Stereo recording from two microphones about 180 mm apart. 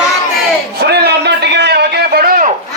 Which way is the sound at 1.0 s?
70° right (ahead or behind).